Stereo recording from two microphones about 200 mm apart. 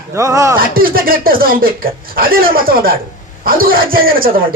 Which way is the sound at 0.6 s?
45° right (ahead or behind).